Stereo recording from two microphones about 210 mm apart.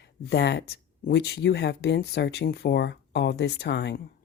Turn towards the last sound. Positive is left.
turn(degrees=55)  # may be behind; listen again after turning